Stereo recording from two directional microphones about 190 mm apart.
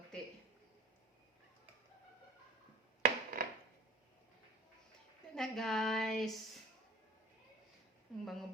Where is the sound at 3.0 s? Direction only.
50° right (ahead or behind).